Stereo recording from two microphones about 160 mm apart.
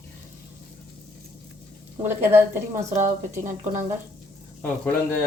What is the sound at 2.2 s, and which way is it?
Speech, 15° right (ahead or behind).